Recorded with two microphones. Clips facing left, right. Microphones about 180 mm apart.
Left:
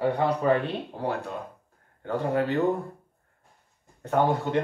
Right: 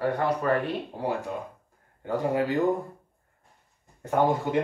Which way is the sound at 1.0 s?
10° right (ahead or behind).